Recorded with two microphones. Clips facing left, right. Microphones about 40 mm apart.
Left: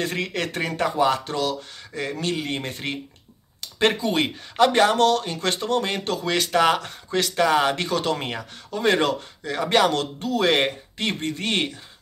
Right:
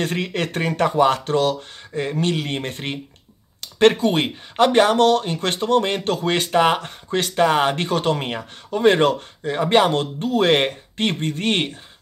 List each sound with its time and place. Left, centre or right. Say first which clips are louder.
0.0 s speech: right 3 dB; right